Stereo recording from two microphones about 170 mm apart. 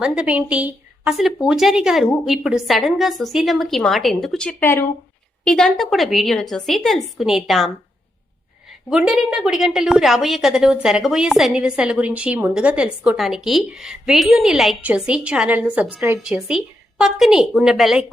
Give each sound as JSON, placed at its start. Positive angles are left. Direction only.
{"t": 0.0, "sound": "a woman's voice", "side_deg": -5}
{"t": 8.9, "sound": "a woman's voice", "side_deg": -5}